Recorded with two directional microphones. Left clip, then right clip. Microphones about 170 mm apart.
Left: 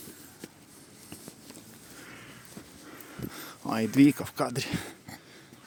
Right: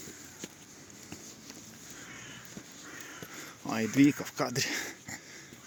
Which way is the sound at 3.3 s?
30° left (ahead or behind).